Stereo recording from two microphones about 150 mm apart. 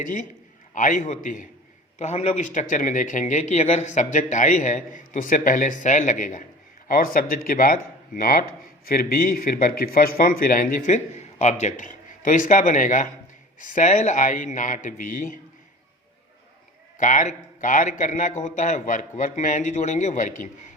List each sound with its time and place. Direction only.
0.7 s speech: 60° left (ahead or behind)
2.0 s speech: 45° left (ahead or behind); by 15.4 s 65° left (ahead or behind)
17.0 s speech: 60° left (ahead or behind)